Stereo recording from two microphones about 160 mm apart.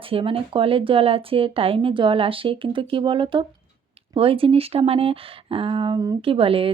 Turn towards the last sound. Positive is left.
turn(degrees=-35)  # may be behind; listen again after turning